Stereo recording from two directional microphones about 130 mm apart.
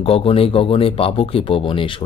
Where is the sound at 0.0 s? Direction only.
45° left (ahead or behind).